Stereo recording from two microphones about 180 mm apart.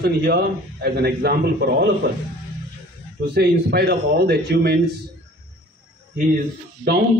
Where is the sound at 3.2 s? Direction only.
65° right (ahead or behind).